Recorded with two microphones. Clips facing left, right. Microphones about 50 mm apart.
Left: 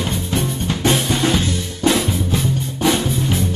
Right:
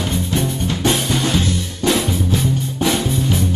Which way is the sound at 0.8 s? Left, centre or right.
Left.